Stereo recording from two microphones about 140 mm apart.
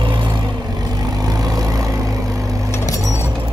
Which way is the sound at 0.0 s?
35° right (ahead or behind).